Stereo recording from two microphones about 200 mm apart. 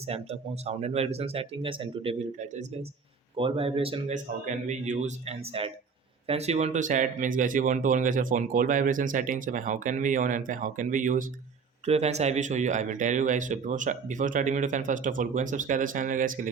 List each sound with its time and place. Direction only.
0.1 s a man's voice: 30° right (ahead or behind)